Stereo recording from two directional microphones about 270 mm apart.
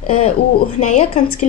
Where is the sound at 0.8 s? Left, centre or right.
Left.